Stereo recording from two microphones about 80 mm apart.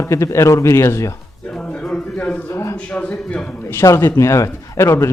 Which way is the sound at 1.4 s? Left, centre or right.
Centre.